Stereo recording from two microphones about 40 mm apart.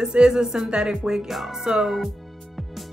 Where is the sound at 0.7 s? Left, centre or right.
Right.